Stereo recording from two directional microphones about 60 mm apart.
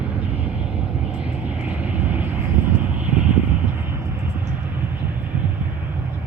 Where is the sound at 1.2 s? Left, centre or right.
Right.